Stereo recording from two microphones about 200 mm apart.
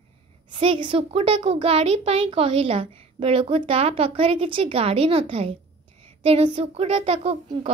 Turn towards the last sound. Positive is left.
turn(degrees=-30)  # may be behind; listen again after turning